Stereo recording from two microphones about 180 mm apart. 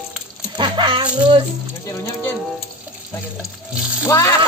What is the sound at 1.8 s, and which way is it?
Speech, 15° left (ahead or behind).